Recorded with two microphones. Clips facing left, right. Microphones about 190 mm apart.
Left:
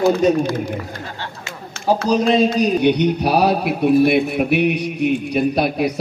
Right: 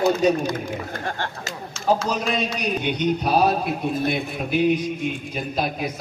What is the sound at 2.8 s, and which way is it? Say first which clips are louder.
A man's voice: left 7 dB; 70° left (ahead or behind).